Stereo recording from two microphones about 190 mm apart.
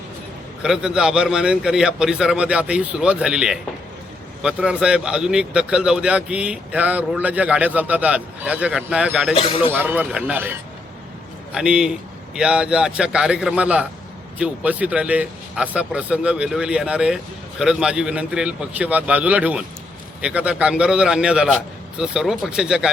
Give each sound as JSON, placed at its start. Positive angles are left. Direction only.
{"t": 0.6, "sound": "speech", "side_deg": -5}
{"t": 9.3, "sound": "speech", "side_deg": 30}
{"t": 9.7, "sound": "a man's voice", "side_deg": -10}